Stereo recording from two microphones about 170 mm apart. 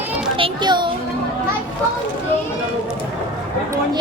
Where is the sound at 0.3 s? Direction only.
30° right (ahead or behind).